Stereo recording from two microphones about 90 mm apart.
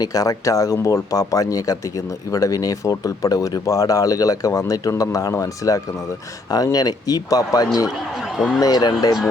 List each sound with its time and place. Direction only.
0.0 s speech: 45° left (ahead or behind)
8.4 s speech: centre (ahead or behind)
8.6 s speech: 50° left (ahead or behind)